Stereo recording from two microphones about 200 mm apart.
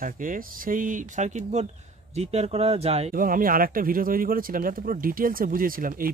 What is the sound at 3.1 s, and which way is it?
Speech, 45° right (ahead or behind).